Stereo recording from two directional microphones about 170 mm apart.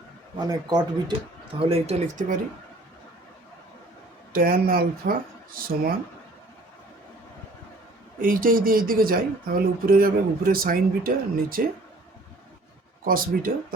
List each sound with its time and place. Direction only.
0.3 s speech: 25° right (ahead or behind)
4.3 s speech: 55° right (ahead or behind)
8.2 s speech: 55° right (ahead or behind)
13.1 s speech: 55° right (ahead or behind)